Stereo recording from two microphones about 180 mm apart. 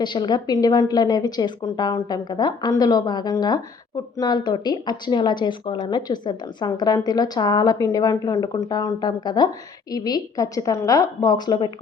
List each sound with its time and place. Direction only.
0.0 s speech: 25° left (ahead or behind)